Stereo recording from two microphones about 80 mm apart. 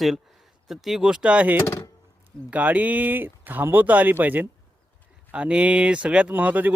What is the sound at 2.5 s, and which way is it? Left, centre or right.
Speech, centre.